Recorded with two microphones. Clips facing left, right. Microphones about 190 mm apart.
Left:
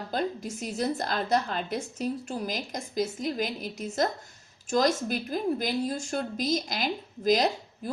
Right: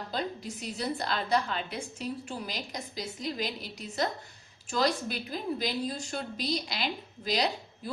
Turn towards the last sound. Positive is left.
turn(degrees=45)  # may be behind; listen again after turning